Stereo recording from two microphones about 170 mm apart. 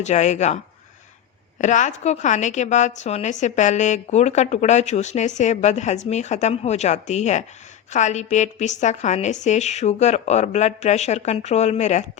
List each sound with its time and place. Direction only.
0.0 s a woman's voice: 45° left (ahead or behind)